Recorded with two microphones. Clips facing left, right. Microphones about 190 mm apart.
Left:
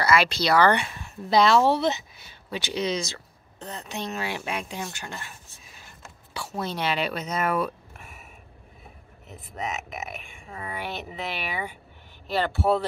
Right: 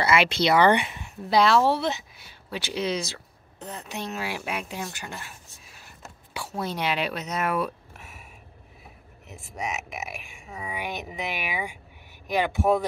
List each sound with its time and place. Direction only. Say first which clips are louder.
0.0 s speech: right 1 dB; 25° right (ahead or behind)
1.3 s speech: left 1 dB; 5° right (ahead or behind)
7.0 s speech: left 1 dB; 5° left (ahead or behind)
9.6 s speech: even; centre (ahead or behind)